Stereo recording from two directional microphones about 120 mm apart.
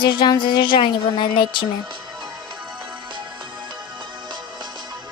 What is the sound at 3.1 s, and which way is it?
Music, 45° right (ahead or behind).